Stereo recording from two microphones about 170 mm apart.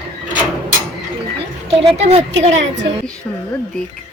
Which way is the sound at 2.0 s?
40° right (ahead or behind).